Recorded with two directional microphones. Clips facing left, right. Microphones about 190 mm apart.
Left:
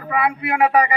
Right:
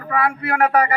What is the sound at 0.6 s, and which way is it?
Speech, 5° left (ahead or behind).